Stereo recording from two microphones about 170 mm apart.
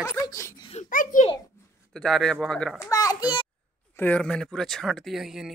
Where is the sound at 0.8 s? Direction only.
50° left (ahead or behind).